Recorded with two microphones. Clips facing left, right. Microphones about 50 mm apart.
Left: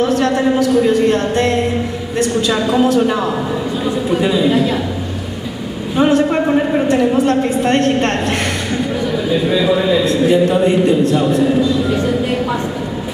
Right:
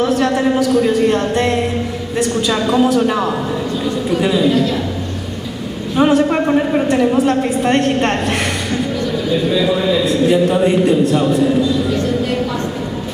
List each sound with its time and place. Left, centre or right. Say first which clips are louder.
0.8 s a woman's voice: left 1 dB; centre
4.5 s a woman's voice: left 1 dB; centre
5.9 s a woman's voice: even; centre
6.4 s a woman's voice: even; centre
9.0 s a man's voice: left 1 dB; centre
11.9 s a sound: left 1 dB; centre